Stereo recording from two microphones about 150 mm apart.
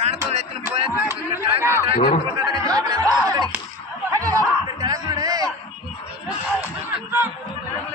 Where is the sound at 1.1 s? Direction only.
15° right (ahead or behind).